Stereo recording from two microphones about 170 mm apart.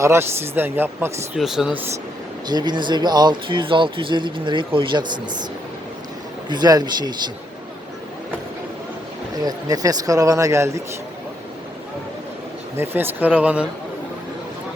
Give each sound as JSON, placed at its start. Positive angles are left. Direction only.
{"t": 0.0, "sound": "speech", "side_deg": -15}
{"t": 1.4, "sound": "speech", "side_deg": 0}
{"t": 2.5, "sound": "speech", "side_deg": -25}
{"t": 6.5, "sound": "speech", "side_deg": -25}
{"t": 9.4, "sound": "speech", "side_deg": -20}
{"t": 12.7, "sound": "speech", "side_deg": -10}